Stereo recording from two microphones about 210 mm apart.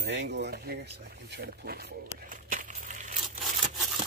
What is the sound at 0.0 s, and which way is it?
Speech, 55° right (ahead or behind).